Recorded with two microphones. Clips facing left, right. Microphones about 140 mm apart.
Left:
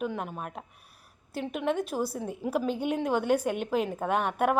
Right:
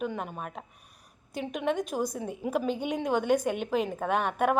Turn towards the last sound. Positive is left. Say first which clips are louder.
# even
turn(degrees=5)  # may be behind; listen again after turning